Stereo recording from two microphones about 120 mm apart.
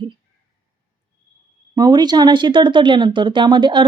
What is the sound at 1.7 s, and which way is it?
Speech, 35° right (ahead or behind).